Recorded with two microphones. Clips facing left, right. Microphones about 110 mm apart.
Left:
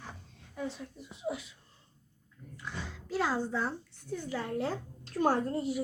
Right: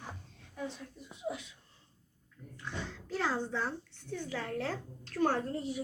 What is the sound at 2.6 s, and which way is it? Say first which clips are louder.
Oink: right 1 dB; 10° left (ahead or behind).